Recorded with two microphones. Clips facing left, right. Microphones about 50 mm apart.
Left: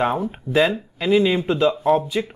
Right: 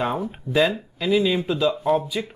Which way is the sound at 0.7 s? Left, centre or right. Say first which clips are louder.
Left 3 dB; left.